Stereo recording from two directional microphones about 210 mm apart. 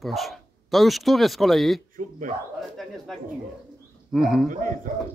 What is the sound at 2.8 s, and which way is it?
Speech, centre (ahead or behind).